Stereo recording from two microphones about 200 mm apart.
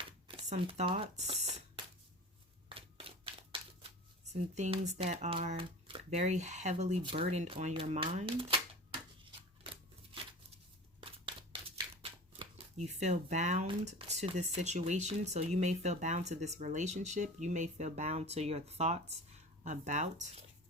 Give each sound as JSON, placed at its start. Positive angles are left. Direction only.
{"t": 0.3, "sound": "shuffling cards", "side_deg": -25}
{"t": 7.0, "sound": "speech", "side_deg": -25}
{"t": 11.0, "sound": "crumpling", "side_deg": -25}
{"t": 12.7, "sound": "speech", "side_deg": -35}